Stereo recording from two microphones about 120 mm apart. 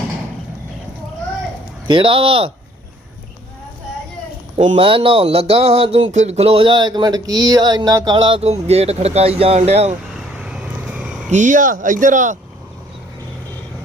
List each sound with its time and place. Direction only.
1.9 s speech: 45° right (ahead or behind)
4.8 s speech: 50° right (ahead or behind)
6.1 s speech: 70° right (ahead or behind); by 8.4 s 40° right (ahead or behind)
8.4 s speech: 60° right (ahead or behind)
10.3 s vehicle: 5° right (ahead or behind)
11.3 s speech: 90° right